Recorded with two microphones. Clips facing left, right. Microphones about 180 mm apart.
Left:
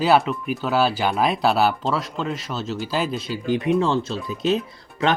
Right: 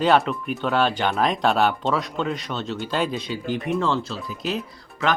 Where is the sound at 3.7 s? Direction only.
20° left (ahead or behind).